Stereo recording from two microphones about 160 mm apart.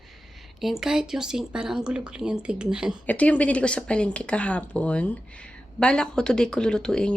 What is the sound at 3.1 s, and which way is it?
Speech, 10° left (ahead or behind).